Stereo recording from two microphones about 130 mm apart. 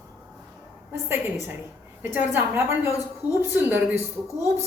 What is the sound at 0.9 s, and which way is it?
A woman's voice, 15° right (ahead or behind).